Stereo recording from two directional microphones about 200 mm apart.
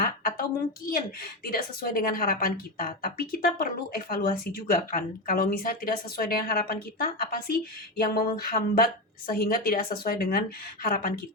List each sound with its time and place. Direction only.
0.9 s a woman's voice: 45° left (ahead or behind)